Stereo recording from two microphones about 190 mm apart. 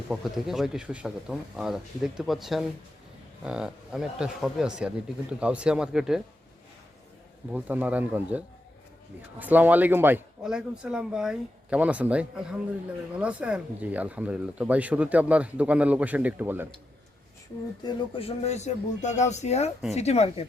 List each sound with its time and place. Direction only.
0.1 s speech: centre (ahead or behind)
7.5 s speech: 10° right (ahead or behind)
17.8 s speech: 30° left (ahead or behind)